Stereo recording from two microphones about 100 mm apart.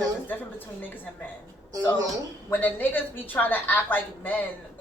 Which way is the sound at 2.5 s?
20° left (ahead or behind).